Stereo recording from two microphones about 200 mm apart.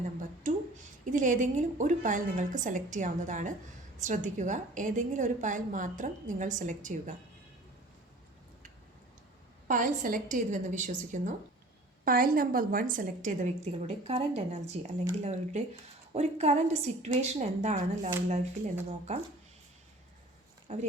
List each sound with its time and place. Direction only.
0.4 s a sound: 40° right (ahead or behind)
1.1 s a woman's voice: 40° right (ahead or behind)
9.6 s a woman's voice: 40° right (ahead or behind)
20.7 s a woman's voice: 35° right (ahead or behind)